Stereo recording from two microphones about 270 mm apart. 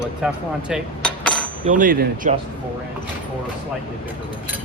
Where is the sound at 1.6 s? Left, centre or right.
Right.